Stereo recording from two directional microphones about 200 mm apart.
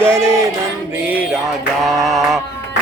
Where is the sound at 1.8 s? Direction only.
Centre (ahead or behind).